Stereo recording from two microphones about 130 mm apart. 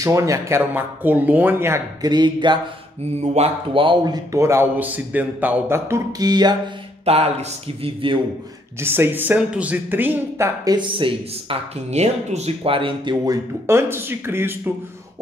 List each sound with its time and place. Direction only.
0.0 s speech: 25° right (ahead or behind)
2.0 s speech: 35° right (ahead or behind)
3.2 s speech: 55° right (ahead or behind)
3.7 s speech: 40° right (ahead or behind)
7.1 s a man's voice: 55° right (ahead or behind)
7.8 s a man's voice: 40° right (ahead or behind)
8.7 s speech: 20° right (ahead or behind)